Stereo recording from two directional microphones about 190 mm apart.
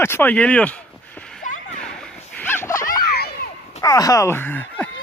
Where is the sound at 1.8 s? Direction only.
5° left (ahead or behind).